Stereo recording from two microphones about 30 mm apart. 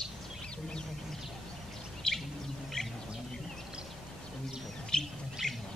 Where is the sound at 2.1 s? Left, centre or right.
Left.